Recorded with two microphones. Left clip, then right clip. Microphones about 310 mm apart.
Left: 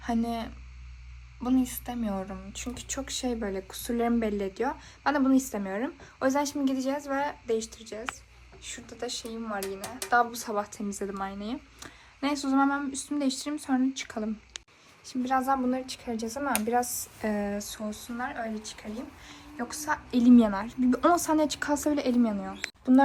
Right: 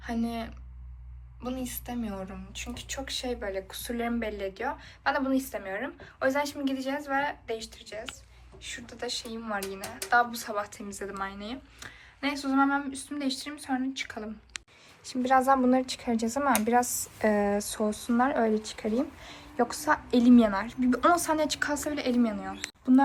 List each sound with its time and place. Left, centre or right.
1.5 s a woman's voice: left